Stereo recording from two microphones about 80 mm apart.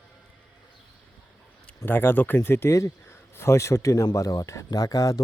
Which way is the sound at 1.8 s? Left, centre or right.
Left.